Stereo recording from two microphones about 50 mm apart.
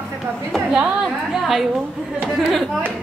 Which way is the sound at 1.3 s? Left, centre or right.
Centre.